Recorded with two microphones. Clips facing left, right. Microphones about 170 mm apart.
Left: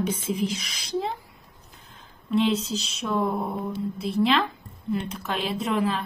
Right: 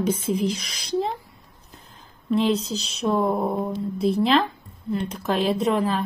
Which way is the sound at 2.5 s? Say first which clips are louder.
Right 1 dB; 35° right (ahead or behind).